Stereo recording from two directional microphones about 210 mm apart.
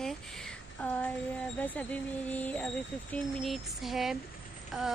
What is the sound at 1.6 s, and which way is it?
Speech, 5° left (ahead or behind).